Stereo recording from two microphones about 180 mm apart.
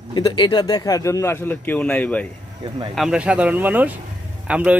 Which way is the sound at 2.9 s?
5° right (ahead or behind).